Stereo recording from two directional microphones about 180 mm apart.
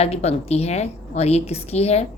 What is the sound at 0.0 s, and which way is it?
A woman's voice, 35° left (ahead or behind).